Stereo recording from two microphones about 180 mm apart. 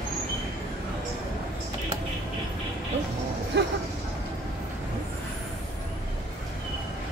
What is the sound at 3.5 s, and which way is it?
Vehicle, 65° right (ahead or behind).